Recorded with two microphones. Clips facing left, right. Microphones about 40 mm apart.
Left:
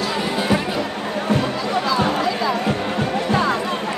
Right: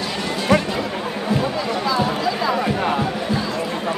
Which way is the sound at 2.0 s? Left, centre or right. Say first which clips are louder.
Left 1 dB; left.